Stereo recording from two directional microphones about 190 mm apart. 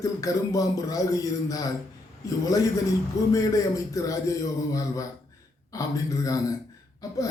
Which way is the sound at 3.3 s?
20° left (ahead or behind).